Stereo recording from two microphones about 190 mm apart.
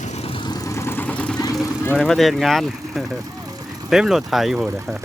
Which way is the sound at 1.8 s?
5° left (ahead or behind).